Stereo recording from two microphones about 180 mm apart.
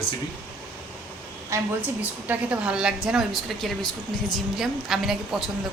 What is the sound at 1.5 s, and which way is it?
A woman's voice, 10° right (ahead or behind).